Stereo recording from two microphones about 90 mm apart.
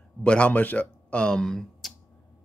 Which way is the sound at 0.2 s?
15° left (ahead or behind).